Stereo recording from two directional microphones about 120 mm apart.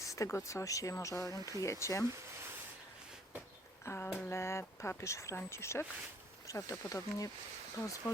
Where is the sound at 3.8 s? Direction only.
20° left (ahead or behind).